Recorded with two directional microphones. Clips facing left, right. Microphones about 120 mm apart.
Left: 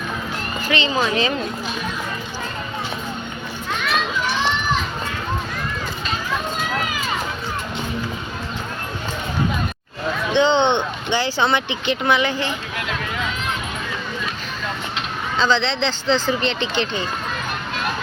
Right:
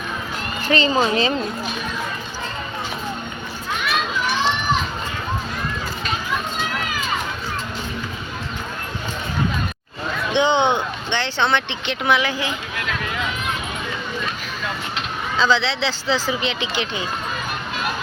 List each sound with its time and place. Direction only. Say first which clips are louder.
0.7 s speech: right 3 dB; 35° right (ahead or behind)
10.3 s speech: left 1 dB; 15° right (ahead or behind)
11.1 s speech: left 1 dB; 5° left (ahead or behind)
14.9 s speech: even; 5° right (ahead or behind)